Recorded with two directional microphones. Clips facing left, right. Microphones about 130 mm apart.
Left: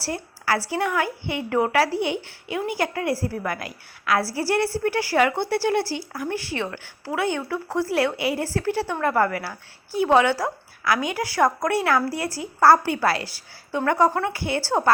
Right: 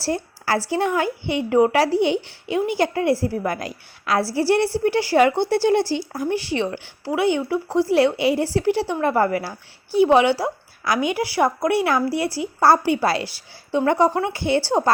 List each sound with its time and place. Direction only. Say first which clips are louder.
0.0 s a woman's voice: right 4 dB; 30° right (ahead or behind)